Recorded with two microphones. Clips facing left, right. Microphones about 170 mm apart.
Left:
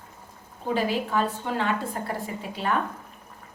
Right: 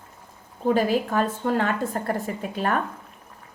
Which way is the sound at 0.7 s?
45° right (ahead or behind).